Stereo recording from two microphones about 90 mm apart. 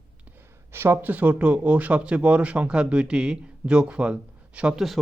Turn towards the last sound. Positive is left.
turn(degrees=-10)  # may be behind; listen again after turning